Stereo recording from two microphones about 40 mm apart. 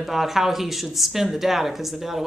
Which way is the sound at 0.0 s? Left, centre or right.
Centre.